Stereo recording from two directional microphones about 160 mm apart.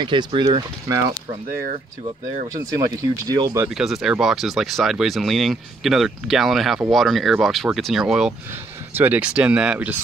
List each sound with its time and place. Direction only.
0.0 s speech: 30° right (ahead or behind)
3.0 s speech: 20° right (ahead or behind)
3.6 s speech: centre (ahead or behind)